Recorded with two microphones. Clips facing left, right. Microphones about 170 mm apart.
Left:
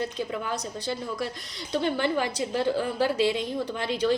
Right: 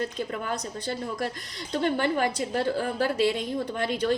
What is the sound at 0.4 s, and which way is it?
A woman's voice, 50° right (ahead or behind).